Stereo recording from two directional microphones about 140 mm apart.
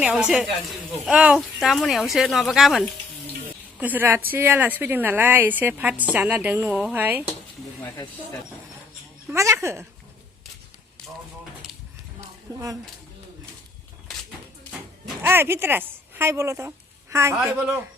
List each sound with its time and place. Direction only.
0.0 s speech: 5° right (ahead or behind)
3.8 s speech: 10° right (ahead or behind)
9.3 s speech: 20° right (ahead or behind)
15.2 s a woman's voice: 15° right (ahead or behind)